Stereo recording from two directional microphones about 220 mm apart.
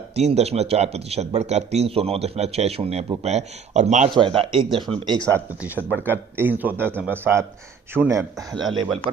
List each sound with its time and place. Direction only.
0.2 s a man's voice: 30° right (ahead or behind)
5.3 s a man's voice: 10° right (ahead or behind)